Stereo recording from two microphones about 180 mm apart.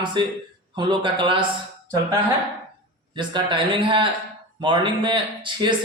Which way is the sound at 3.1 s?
25° right (ahead or behind).